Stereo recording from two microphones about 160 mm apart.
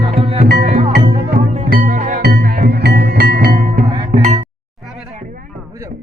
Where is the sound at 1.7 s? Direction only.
55° right (ahead or behind).